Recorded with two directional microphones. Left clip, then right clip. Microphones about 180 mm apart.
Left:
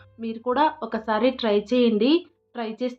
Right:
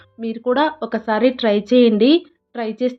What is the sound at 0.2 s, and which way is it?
A woman's voice, 20° right (ahead or behind).